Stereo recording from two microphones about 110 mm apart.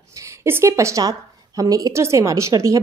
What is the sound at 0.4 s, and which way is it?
A woman's voice, 25° right (ahead or behind).